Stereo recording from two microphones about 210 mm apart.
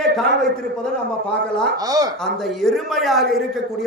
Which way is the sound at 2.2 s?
Centre (ahead or behind).